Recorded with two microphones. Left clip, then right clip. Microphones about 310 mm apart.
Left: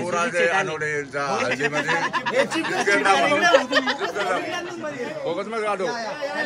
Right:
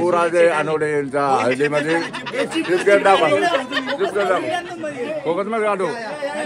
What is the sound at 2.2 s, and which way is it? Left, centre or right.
Speech, left.